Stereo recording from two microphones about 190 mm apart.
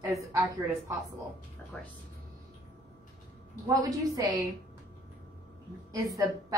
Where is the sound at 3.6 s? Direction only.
20° right (ahead or behind).